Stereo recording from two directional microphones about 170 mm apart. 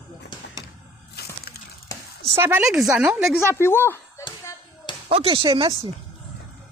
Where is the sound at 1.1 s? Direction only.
70° left (ahead or behind).